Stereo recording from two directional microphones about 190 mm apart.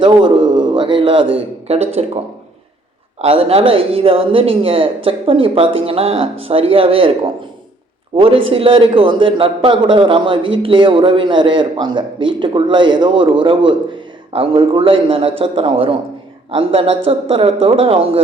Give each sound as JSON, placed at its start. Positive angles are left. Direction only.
{"t": 0.0, "sound": "a sound", "side_deg": -25}
{"t": 1.6, "sound": "a man's voice", "side_deg": -35}
{"t": 3.2, "sound": "a man's voice", "side_deg": -30}
{"t": 8.1, "sound": "a man's voice", "side_deg": -30}